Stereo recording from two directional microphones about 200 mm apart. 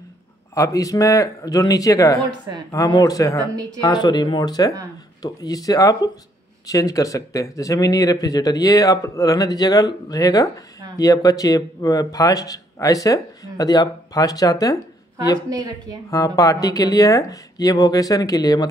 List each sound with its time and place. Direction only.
0.6 s speech: 15° left (ahead or behind)
15.5 s speech: 20° right (ahead or behind)
16.1 s speech: 15° left (ahead or behind)